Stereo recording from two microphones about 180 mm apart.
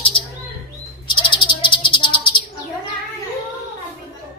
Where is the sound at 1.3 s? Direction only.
25° left (ahead or behind).